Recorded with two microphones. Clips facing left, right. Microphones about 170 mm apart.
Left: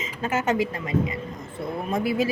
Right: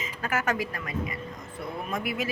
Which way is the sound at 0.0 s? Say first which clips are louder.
Left 4 dB; 25° left (ahead or behind).